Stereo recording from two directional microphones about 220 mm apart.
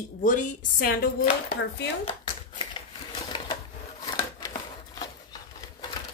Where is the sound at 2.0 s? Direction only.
20° left (ahead or behind).